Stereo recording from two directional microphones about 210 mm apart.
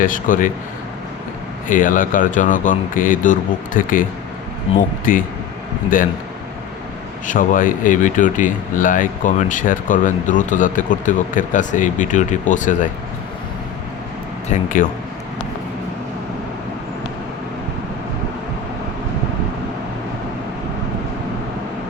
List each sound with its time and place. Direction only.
0.0 s speech: 40° left (ahead or behind)
1.6 s speech: 40° left (ahead or behind)
7.3 s speech: 40° left (ahead or behind)
14.5 s speech: 40° left (ahead or behind)